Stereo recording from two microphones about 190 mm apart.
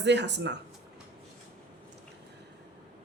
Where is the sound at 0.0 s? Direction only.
65° right (ahead or behind).